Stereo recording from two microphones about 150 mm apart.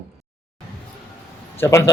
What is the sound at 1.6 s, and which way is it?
Speech, 20° left (ahead or behind).